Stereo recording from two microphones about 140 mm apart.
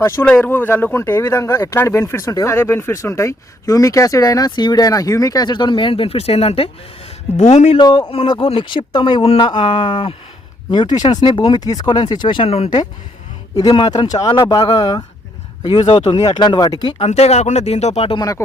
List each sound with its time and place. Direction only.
0.0 s speech: 15° left (ahead or behind); by 7.8 s 55° left (ahead or behind)
7.8 s speech: 30° left (ahead or behind)
13.6 s speech: 30° left (ahead or behind)
15.8 s speech: 50° left (ahead or behind)
16.2 s speech: 30° left (ahead or behind)
17.0 s speech: 50° left (ahead or behind)
18.2 s speech: 25° left (ahead or behind)